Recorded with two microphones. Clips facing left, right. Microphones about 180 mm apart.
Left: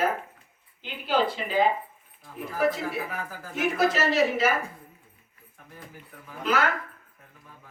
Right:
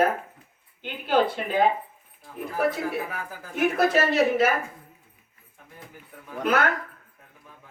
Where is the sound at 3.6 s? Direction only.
55° right (ahead or behind).